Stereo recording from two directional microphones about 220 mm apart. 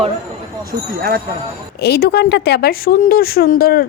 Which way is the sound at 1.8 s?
45° left (ahead or behind).